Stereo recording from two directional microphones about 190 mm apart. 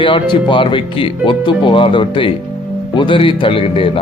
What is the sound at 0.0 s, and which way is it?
Speech, 25° left (ahead or behind).